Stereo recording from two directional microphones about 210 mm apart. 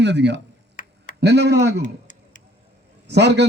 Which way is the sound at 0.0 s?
55° right (ahead or behind).